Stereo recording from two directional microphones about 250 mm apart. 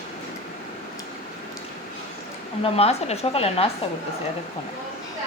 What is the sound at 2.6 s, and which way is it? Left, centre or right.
A woman's voice, left.